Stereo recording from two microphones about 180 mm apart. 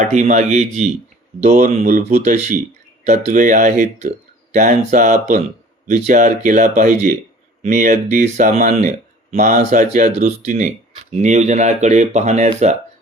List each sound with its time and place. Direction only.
0.0 s speech: 40° right (ahead or behind)